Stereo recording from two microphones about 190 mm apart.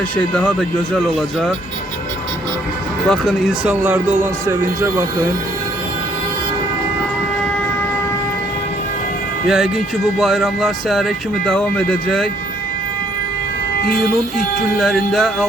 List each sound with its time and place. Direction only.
0.2 s speech: 5° left (ahead or behind)
3.1 s speech: centre (ahead or behind); by 5.0 s 15° right (ahead or behind)
9.5 s speech: centre (ahead or behind)
14.3 s speech: centre (ahead or behind)